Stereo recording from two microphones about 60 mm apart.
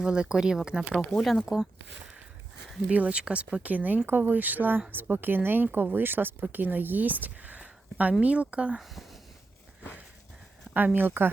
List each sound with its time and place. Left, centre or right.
0.0 s speech: centre
1.1 s speech: centre
2.9 s speech: right
10.8 s speech: right